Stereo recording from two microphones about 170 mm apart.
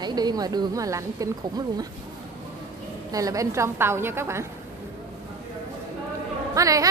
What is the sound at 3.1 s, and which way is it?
A woman's voice, 20° right (ahead or behind).